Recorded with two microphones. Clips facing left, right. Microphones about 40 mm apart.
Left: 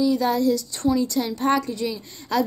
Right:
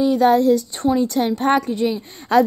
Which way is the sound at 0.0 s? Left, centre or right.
Right.